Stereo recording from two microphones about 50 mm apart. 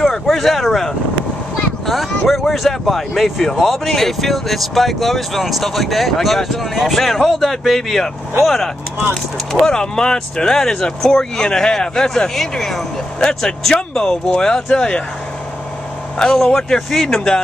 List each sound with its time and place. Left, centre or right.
0.0 s a sound: centre
1.9 s speech: centre
9.5 s speech: centre
16.2 s speech: centre